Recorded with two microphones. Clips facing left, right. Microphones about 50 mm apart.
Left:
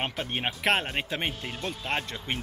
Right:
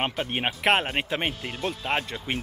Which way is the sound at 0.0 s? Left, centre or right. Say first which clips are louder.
Right 3 dB; centre.